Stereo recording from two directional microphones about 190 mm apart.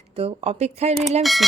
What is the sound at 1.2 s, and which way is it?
Speech, centre (ahead or behind).